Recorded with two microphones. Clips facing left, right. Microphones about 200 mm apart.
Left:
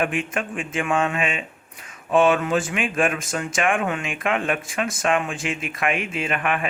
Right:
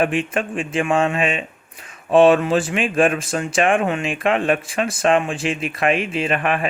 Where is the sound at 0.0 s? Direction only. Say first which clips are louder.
Right 4 dB; 30° right (ahead or behind).